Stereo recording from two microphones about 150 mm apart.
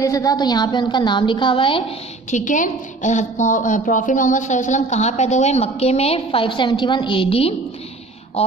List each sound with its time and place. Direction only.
0.0 s a woman's voice: 20° left (ahead or behind)
2.3 s a woman's voice: 60° left (ahead or behind); by 8.5 s 40° left (ahead or behind)